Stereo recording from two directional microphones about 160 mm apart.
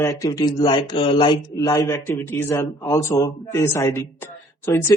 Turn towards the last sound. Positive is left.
turn(degrees=15)  # may be behind; listen again after turning